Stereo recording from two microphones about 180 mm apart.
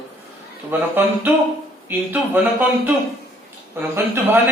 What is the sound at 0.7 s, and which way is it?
A man's voice, 10° right (ahead or behind).